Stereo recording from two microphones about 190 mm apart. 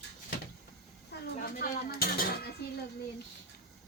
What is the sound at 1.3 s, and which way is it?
Speech, 55° left (ahead or behind).